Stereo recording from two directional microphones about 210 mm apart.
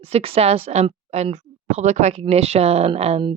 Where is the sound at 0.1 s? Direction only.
30° right (ahead or behind).